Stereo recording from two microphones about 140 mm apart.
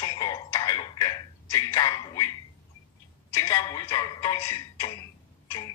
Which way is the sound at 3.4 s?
25° left (ahead or behind).